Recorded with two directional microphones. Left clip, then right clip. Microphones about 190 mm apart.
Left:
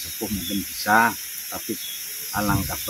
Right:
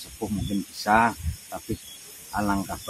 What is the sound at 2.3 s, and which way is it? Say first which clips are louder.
Speech: left 2 dB; 25° right (ahead or behind).